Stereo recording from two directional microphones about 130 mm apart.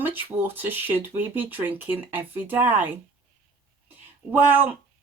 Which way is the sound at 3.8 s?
15° right (ahead or behind).